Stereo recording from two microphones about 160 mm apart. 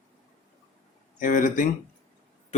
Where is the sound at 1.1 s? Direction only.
55° left (ahead or behind).